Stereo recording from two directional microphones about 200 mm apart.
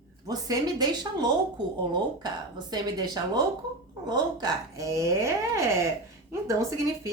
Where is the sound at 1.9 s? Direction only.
20° right (ahead or behind).